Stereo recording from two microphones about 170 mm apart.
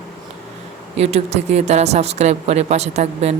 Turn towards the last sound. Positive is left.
turn(degrees=-40)  # may be behind; listen again after turning